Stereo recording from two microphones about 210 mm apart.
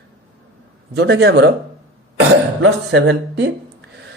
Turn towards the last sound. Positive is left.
turn(degrees=-60)  # may be behind; listen again after turning